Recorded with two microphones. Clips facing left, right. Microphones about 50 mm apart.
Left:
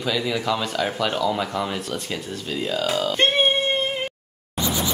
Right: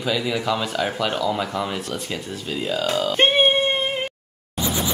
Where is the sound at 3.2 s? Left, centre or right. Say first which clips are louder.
Right 3 dB; centre.